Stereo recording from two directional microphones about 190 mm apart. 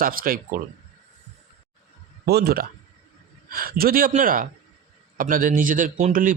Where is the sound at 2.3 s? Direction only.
55° right (ahead or behind).